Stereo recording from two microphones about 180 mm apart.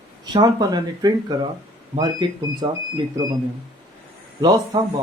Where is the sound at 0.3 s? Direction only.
20° right (ahead or behind).